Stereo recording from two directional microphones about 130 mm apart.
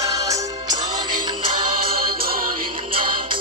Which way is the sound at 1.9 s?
90° right.